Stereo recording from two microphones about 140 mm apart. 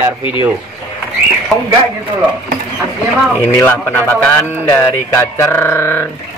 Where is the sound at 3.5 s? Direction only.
15° left (ahead or behind).